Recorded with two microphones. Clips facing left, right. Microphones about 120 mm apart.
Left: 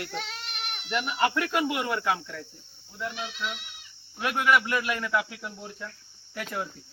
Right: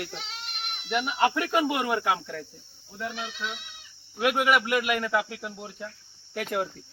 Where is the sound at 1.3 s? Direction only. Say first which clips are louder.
Right 2 dB; 20° right (ahead or behind).